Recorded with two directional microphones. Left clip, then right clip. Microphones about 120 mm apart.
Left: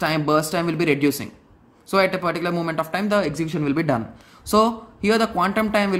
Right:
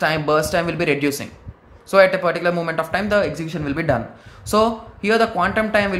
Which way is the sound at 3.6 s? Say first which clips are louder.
Right 2 dB; 30° left (ahead or behind).